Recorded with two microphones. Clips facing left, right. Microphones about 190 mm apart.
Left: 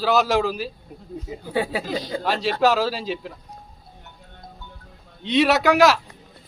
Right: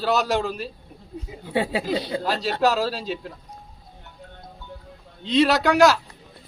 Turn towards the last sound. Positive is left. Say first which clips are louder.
# left 1 dB
turn(degrees=0)  # may be behind; listen again after turning